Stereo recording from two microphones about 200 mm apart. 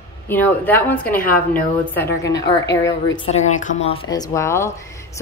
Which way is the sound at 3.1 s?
30° left (ahead or behind).